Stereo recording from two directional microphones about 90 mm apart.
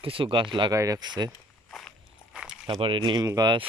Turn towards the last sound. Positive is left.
turn(degrees=-55)  # may be behind; listen again after turning